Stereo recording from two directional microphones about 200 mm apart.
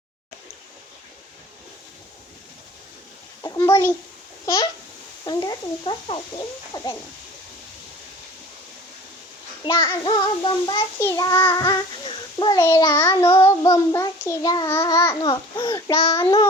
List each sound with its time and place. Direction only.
3.4 s a sound: 15° left (ahead or behind)
4.4 s a child's voice: 15° left (ahead or behind)
5.2 s child singing: 20° left (ahead or behind)
6.7 s a child's voice: 20° left (ahead or behind)
9.6 s child singing: 25° left (ahead or behind)
11.0 s a child's voice: 15° left (ahead or behind)
16.0 s child singing: 30° left (ahead or behind)